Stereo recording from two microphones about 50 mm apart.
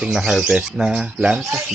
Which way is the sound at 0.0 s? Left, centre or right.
Centre.